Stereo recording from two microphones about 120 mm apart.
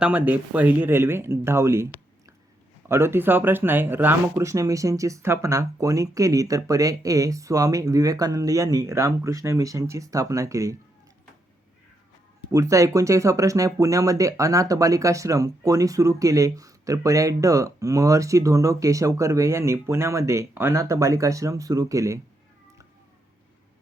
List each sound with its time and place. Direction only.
0.0 s speech: 15° right (ahead or behind)
2.9 s speech: 20° right (ahead or behind)
12.5 s speech: 25° right (ahead or behind)